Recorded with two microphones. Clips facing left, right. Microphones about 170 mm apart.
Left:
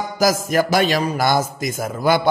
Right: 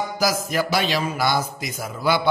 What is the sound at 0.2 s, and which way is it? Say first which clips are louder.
A man's voice: left 6 dB; 45° left (ahead or behind).